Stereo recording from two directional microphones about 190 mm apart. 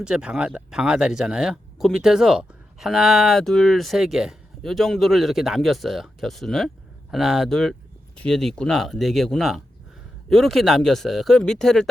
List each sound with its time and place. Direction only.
0.0 s speech: 5° right (ahead or behind)